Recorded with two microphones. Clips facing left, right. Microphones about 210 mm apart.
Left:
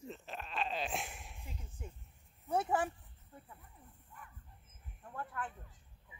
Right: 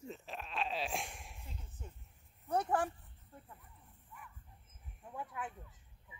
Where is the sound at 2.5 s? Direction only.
5° left (ahead or behind).